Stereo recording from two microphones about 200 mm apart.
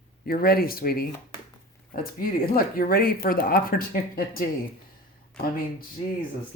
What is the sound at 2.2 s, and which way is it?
Speech, 45° left (ahead or behind).